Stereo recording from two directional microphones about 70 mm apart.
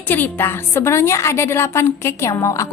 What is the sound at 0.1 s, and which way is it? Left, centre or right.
A woman's voice, left.